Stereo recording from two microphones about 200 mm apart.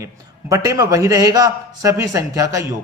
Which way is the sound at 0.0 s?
15° right (ahead or behind).